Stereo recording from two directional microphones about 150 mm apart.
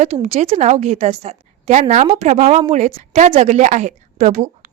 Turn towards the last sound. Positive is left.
turn(degrees=-55)  # may be behind; listen again after turning